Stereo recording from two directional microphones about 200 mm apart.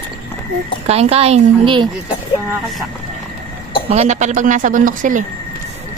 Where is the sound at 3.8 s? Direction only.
35° right (ahead or behind).